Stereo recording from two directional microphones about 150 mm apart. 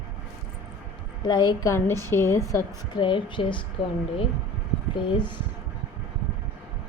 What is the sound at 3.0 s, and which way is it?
Speech, 35° left (ahead or behind).